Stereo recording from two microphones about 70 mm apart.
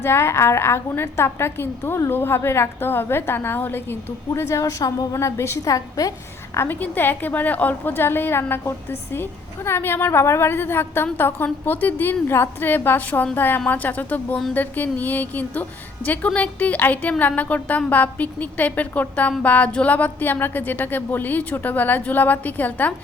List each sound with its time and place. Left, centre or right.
0.0 s a woman's voice: left
4.4 s a woman's voice: left
5.1 s a woman's voice: left
6.6 s a woman's voice: left